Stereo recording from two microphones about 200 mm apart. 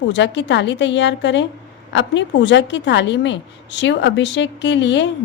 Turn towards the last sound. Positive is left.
turn(degrees=65)  # may be behind; listen again after turning